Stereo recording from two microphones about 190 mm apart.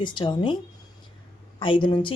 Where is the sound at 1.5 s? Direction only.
25° left (ahead or behind).